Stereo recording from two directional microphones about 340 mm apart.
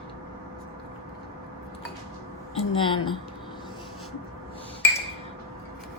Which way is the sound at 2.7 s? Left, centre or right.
Centre.